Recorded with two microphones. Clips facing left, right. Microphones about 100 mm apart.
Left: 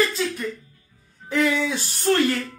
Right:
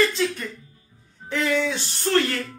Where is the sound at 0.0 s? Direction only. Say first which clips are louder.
Right 1 dB; centre (ahead or behind).